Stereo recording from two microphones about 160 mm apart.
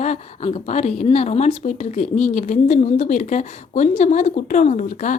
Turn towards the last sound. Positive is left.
turn(degrees=50)  # may be behind; listen again after turning